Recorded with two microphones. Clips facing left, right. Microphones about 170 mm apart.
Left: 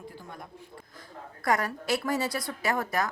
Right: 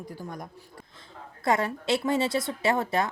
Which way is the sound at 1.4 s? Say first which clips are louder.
Right 2 dB; 25° right (ahead or behind).